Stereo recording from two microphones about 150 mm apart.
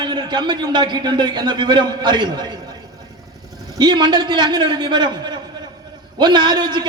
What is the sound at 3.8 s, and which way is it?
A man's voice, 30° right (ahead or behind).